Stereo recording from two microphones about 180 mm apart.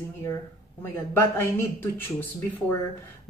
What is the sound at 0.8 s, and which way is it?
Speech, 15° left (ahead or behind).